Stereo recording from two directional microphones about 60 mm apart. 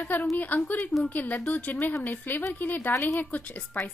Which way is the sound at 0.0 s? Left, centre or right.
Left.